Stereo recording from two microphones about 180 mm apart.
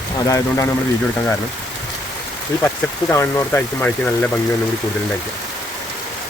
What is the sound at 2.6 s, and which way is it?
Speech, 10° left (ahead or behind).